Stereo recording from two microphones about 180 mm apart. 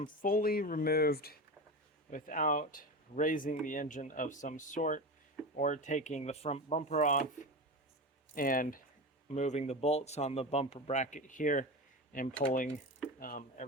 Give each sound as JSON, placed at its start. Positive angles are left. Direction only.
{"t": 0.0, "sound": "speech", "side_deg": 50}
{"t": 2.0, "sound": "speech", "side_deg": 45}
{"t": 9.3, "sound": "speech", "side_deg": 40}